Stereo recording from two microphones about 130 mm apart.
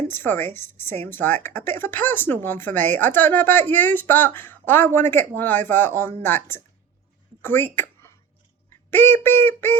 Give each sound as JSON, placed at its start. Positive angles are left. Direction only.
{"t": 0.1, "sound": "a woman's voice", "side_deg": 15}